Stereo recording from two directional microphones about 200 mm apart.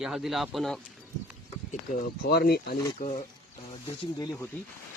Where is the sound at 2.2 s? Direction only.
50° left (ahead or behind).